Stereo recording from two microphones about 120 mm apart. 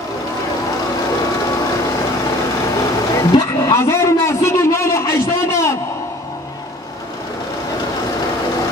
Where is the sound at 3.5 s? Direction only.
20° left (ahead or behind).